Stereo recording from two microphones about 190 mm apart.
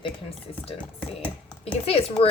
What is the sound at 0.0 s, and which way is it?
Speech, 30° left (ahead or behind).